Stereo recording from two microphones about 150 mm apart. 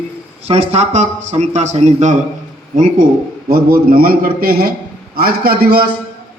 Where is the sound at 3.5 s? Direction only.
70° right (ahead or behind); by 5.8 s 90° right.